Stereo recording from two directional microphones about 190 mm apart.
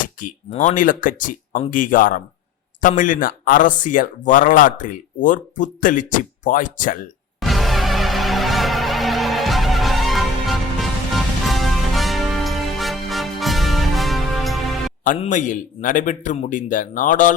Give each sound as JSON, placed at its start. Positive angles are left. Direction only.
{"t": 0.0, "sound": "a sound", "side_deg": 45}
{"t": 0.5, "sound": "speech", "side_deg": 40}
{"t": 7.3, "sound": "music", "side_deg": 0}
{"t": 15.0, "sound": "speech", "side_deg": 45}